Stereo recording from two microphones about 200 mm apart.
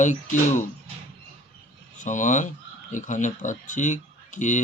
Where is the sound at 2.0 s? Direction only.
40° left (ahead or behind).